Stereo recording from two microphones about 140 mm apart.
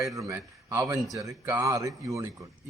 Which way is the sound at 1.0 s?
Centre (ahead or behind).